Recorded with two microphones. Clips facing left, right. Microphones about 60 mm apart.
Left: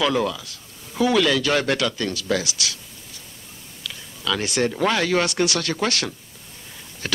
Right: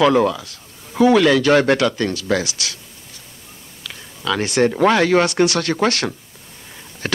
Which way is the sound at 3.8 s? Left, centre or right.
Right.